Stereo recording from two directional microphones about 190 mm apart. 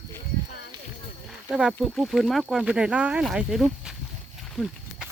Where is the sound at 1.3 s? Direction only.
5° right (ahead or behind).